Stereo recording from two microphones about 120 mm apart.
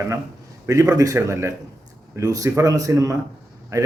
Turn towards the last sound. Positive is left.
turn(degrees=-25)  # may be behind; listen again after turning